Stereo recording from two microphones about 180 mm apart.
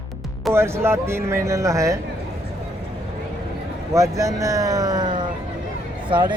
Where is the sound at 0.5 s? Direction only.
15° right (ahead or behind).